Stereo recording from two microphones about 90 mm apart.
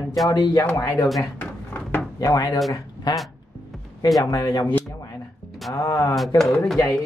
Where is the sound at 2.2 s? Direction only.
45° left (ahead or behind).